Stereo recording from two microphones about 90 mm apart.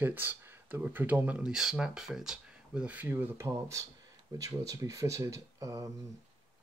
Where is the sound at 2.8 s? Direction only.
20° right (ahead or behind).